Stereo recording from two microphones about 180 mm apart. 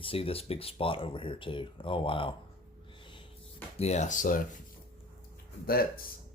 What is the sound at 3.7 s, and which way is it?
Speech, 35° left (ahead or behind).